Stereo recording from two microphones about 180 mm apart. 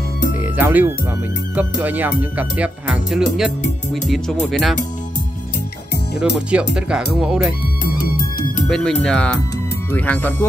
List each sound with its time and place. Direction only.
0.6 s speech: 10° right (ahead or behind)
6.5 s speech: 5° right (ahead or behind)
7.8 s music: 50° left (ahead or behind)
8.6 s speech: centre (ahead or behind)